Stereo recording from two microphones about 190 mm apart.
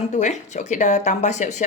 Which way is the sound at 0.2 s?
40° left (ahead or behind).